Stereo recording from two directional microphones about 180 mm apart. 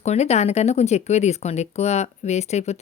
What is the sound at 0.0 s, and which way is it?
Speech, 40° left (ahead or behind).